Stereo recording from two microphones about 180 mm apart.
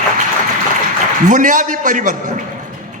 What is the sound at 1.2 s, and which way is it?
A man's voice, 45° right (ahead or behind).